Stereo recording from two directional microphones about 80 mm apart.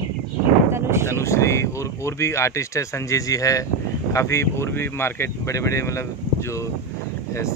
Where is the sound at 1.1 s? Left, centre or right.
Left.